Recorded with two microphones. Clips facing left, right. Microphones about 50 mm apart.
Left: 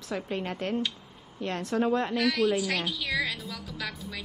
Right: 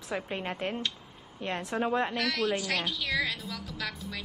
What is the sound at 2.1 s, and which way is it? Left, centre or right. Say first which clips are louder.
A woman's voice: left 4 dB; centre.